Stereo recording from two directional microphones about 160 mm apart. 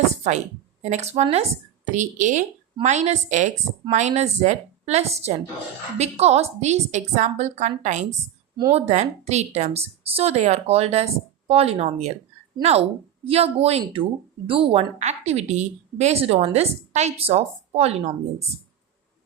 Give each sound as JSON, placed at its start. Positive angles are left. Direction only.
{"t": 0.2, "sound": "a woman's voice", "side_deg": -45}
{"t": 13.2, "sound": "a woman's voice", "side_deg": -40}